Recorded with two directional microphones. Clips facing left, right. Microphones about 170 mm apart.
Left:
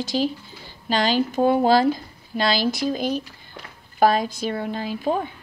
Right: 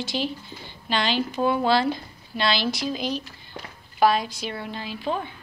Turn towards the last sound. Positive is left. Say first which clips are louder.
# left 5 dB
turn(degrees=45)  # may be behind; listen again after turning